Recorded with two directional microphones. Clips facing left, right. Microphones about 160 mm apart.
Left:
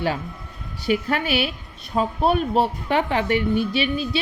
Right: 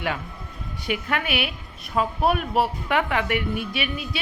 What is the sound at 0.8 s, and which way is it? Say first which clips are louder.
A woman's voice: left 5 dB; 35° left (ahead or behind).